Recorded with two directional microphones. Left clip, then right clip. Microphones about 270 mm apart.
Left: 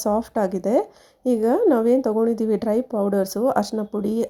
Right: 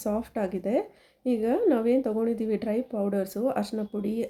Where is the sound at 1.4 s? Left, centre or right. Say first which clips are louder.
Left 6 dB; centre.